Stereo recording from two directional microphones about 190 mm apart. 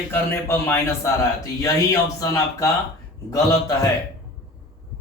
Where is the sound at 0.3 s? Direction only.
15° left (ahead or behind).